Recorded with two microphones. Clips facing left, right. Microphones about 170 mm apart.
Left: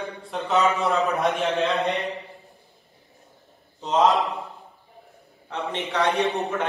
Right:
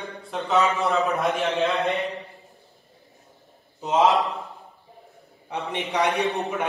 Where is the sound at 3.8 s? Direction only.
5° right (ahead or behind).